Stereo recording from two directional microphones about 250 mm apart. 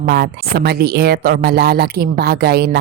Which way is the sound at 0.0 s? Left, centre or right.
Right.